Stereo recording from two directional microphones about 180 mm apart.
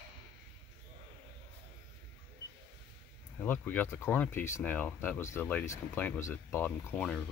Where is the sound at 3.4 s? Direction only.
10° left (ahead or behind).